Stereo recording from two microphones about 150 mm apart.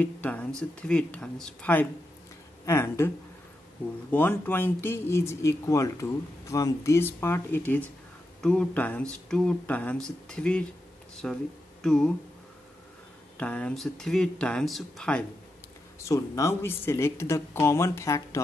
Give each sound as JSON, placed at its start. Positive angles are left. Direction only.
{"t": 0.0, "sound": "speech", "side_deg": 10}
{"t": 4.1, "sound": "speech", "side_deg": 15}
{"t": 13.4, "sound": "speech", "side_deg": 10}
{"t": 16.0, "sound": "speech", "side_deg": 20}